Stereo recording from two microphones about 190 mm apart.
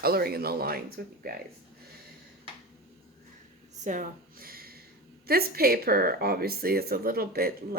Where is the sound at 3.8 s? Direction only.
45° right (ahead or behind).